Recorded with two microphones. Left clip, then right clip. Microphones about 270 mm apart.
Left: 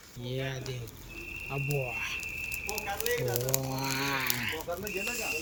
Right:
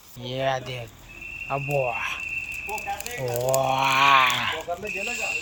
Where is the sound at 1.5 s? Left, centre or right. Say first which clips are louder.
Right 10 dB; right.